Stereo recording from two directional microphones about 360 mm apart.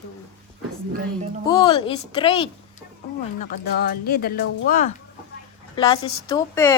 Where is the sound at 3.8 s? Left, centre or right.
Left.